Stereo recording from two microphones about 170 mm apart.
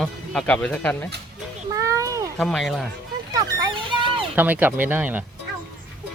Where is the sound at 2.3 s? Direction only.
Centre (ahead or behind).